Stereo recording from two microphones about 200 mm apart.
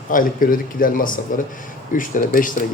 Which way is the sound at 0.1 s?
45° left (ahead or behind).